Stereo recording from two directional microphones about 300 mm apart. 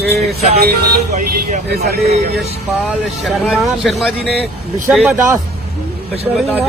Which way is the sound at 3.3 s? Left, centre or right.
Centre.